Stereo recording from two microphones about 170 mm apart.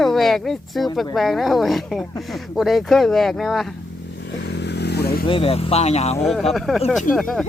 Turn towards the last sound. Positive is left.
turn(degrees=5)  # may be behind; listen again after turning